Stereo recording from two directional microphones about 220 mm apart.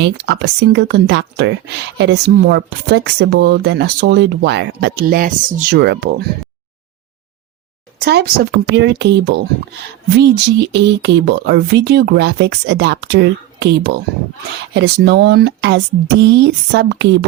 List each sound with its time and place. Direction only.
0.0 s speech: 50° right (ahead or behind)
7.9 s speech: 50° right (ahead or behind)